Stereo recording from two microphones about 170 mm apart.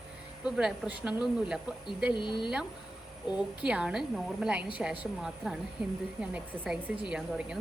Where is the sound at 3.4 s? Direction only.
5° right (ahead or behind).